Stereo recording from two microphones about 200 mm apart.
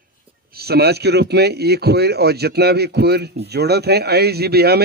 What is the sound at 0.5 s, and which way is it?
A man's voice, 50° right (ahead or behind).